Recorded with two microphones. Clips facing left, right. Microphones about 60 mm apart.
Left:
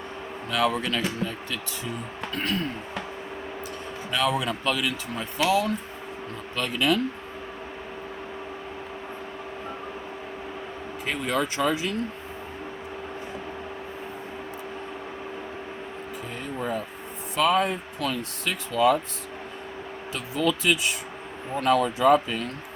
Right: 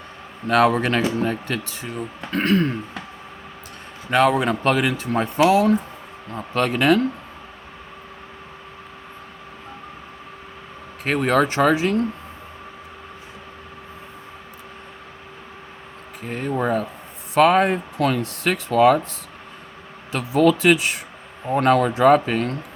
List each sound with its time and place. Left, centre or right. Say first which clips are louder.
0.4 s speech: right 8 dB; right
4.1 s speech: right 8 dB; right
11.0 s speech: right 8 dB; right
16.2 s speech: right 9 dB; right
18.2 s speech: right 7 dB; right
20.1 s speech: right 9 dB; right
21.5 s speech: right 5 dB; right